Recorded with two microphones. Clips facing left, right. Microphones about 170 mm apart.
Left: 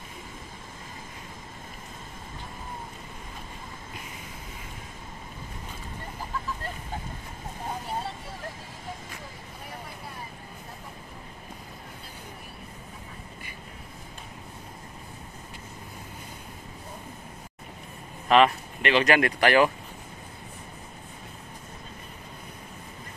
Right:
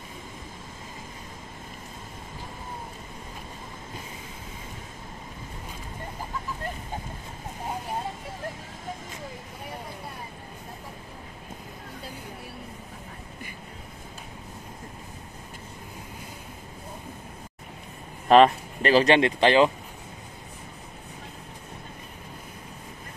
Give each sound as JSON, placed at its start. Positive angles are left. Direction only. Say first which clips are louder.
{"t": 18.3, "sound": "speech", "louder": "right 4 dB", "side_deg": -35}